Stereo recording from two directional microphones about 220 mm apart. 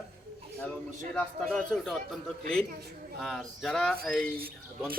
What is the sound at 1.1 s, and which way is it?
Speech, centre (ahead or behind).